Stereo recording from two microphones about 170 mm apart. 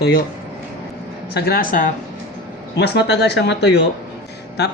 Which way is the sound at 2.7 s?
80° left.